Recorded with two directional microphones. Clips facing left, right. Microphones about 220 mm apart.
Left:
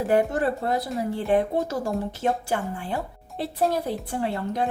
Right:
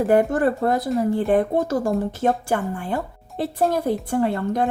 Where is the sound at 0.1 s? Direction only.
50° right (ahead or behind).